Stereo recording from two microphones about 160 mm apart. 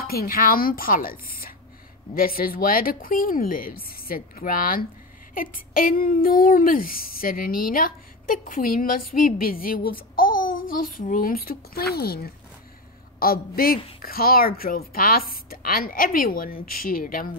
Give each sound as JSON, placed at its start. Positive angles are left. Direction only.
{"t": 0.0, "sound": "a woman's voice", "side_deg": 70}